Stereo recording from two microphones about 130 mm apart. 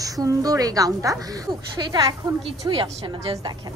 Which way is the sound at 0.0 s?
25° right (ahead or behind).